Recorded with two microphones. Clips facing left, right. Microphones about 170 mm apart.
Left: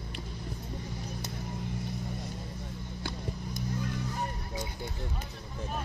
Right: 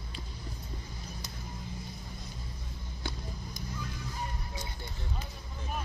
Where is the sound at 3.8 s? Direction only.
60° left (ahead or behind).